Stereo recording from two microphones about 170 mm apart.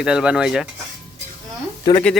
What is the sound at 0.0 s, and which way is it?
Speech, 5° right (ahead or behind).